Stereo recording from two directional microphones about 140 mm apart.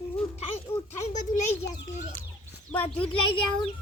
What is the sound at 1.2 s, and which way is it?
Speech, 65° left (ahead or behind).